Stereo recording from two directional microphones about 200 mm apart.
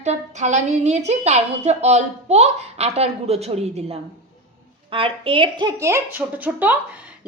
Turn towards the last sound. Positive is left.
turn(degrees=-10)  # may be behind; listen again after turning